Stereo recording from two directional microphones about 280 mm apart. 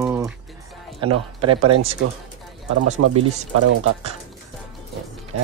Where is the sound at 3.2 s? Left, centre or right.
Right.